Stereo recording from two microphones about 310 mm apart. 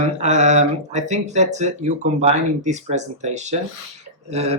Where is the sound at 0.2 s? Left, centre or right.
Right.